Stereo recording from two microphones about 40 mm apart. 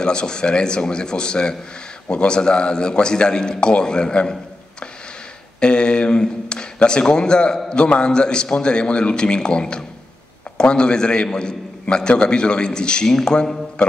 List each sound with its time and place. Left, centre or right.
0.0 s a man's voice: left
5.6 s a man's voice: left